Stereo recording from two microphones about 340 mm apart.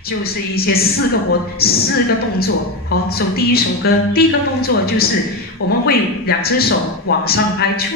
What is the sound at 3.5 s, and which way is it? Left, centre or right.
Speech, left.